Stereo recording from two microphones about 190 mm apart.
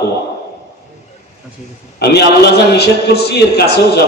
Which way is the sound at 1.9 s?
60° left (ahead or behind).